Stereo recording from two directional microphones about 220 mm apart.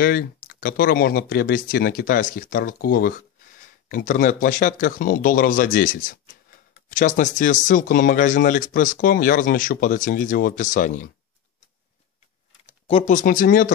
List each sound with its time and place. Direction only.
0.0 s speech: 40° left (ahead or behind)
12.8 s speech: 30° left (ahead or behind)